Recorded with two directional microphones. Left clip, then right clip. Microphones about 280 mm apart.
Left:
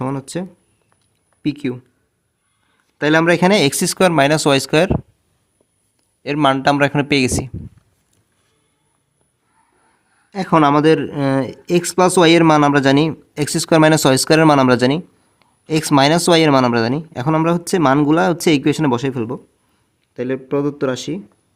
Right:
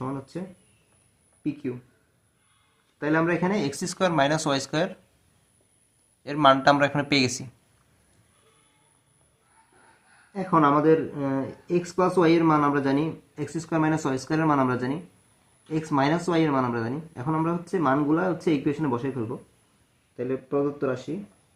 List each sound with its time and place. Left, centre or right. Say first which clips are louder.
0.0 s a sound: left 10 dB; left
1.4 s speech: left 9 dB; left
3.0 s speech: left 11 dB; left
6.2 s speech: left 4 dB; left
10.3 s speech: left 7 dB; left